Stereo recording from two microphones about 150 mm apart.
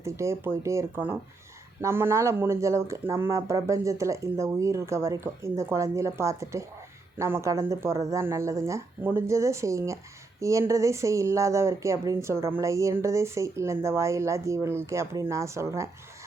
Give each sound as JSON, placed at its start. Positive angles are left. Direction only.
{"t": 0.0, "sound": "speech", "side_deg": -20}